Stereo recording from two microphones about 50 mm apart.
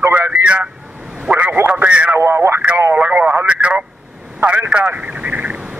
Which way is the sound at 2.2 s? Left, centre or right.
Right.